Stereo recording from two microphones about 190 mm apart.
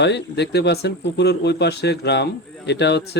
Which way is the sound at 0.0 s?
65° left (ahead or behind).